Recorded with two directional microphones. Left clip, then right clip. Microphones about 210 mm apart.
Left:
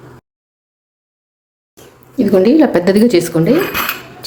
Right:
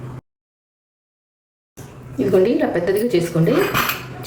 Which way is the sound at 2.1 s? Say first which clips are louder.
Left 6 dB; 40° left (ahead or behind).